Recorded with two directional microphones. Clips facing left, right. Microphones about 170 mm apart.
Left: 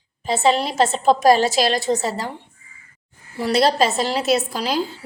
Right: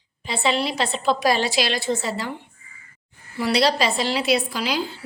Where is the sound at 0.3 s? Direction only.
45° left (ahead or behind).